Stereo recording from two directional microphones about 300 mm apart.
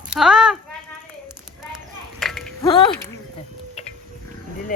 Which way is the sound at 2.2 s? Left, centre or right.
Centre.